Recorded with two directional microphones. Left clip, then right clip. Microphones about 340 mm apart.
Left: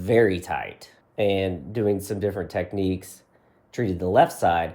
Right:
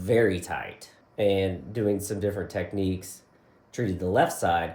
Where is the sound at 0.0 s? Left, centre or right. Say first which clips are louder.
Left 3 dB; centre.